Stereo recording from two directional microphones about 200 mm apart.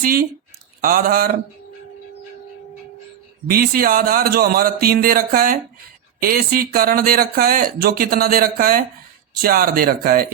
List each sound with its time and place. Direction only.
0.0 s speech: 45° right (ahead or behind)
3.4 s speech: 50° right (ahead or behind)